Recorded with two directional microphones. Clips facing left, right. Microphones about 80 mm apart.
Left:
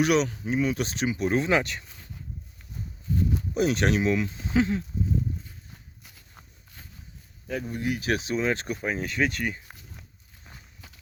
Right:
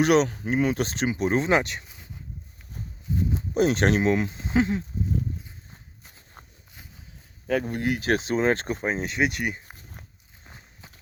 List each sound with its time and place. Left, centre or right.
0.0 s speech: right
1.1 s speech: right
3.5 s speech: right
6.1 s walk: right
7.4 s speech: right; by 9.7 s centre
10.4 s walk: right